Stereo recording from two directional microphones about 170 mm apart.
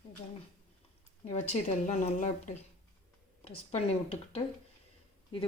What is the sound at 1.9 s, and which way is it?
Speech, 45° left (ahead or behind).